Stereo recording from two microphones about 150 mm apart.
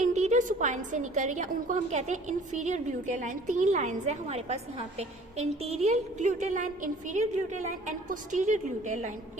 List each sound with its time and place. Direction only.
0.0 s a woman's voice: 50° right (ahead or behind)